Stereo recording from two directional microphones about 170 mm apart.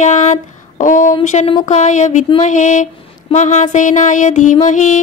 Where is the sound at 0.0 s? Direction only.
45° left (ahead or behind).